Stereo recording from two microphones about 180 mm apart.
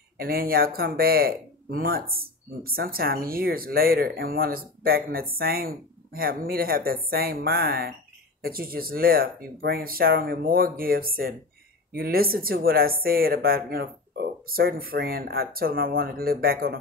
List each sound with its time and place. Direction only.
0.2 s speech: 55° right (ahead or behind)